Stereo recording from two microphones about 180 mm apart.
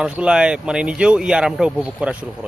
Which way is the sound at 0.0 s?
5° right (ahead or behind).